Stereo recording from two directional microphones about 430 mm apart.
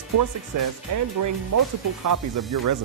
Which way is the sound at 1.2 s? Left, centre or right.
Right.